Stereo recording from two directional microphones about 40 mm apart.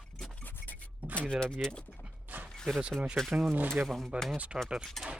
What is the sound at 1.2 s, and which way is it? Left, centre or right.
Speech, centre.